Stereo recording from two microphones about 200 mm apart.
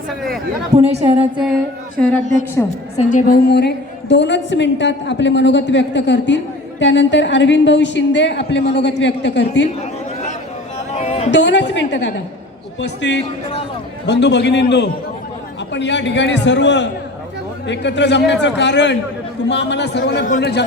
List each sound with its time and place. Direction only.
0.8 s a woman's voice: 30° right (ahead or behind)
2.0 s a woman's voice: 5° left (ahead or behind)
3.0 s a woman's voice: 40° left (ahead or behind); by 9.6 s 60° left (ahead or behind)
10.9 s a sound: 30° left (ahead or behind)
11.3 s a woman's voice: 60° left (ahead or behind)
14.1 s a woman's voice: 60° left (ahead or behind)